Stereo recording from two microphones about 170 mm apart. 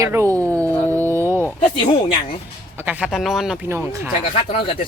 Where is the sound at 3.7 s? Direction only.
15° right (ahead or behind).